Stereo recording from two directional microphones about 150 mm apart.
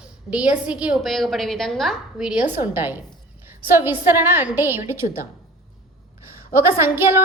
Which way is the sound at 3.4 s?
15° right (ahead or behind).